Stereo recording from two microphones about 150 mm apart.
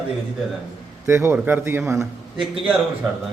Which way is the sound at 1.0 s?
15° right (ahead or behind).